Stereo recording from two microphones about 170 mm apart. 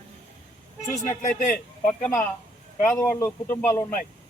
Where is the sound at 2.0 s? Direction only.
10° left (ahead or behind).